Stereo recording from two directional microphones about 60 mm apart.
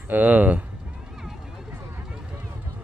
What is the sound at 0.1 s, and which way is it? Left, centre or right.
Speech, right.